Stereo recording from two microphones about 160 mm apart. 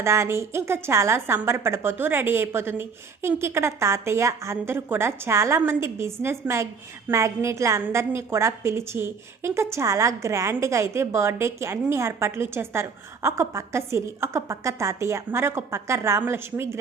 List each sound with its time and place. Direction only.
0.0 s a woman's voice: 15° right (ahead or behind)